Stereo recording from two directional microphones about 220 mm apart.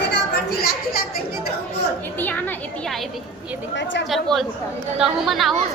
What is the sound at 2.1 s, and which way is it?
Speech, 10° left (ahead or behind).